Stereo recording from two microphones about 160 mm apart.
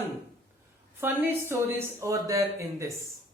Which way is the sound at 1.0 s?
15° right (ahead or behind).